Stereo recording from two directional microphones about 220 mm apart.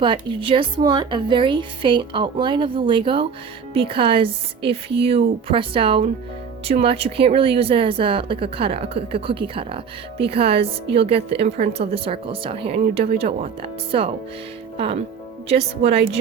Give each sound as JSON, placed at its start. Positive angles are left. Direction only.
{"t": 0.0, "sound": "speech", "side_deg": -20}
{"t": 15.4, "sound": "speech", "side_deg": -25}